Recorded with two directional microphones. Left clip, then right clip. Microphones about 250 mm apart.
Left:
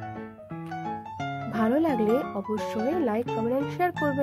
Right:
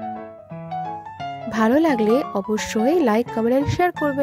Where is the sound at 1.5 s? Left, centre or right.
Right.